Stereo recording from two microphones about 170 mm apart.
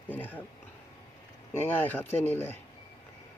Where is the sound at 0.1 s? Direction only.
10° left (ahead or behind).